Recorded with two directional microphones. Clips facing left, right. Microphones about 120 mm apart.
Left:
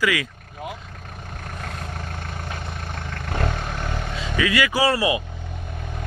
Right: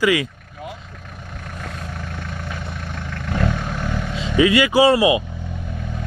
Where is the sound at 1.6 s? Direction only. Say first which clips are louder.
Right 2 dB; 40° left (ahead or behind).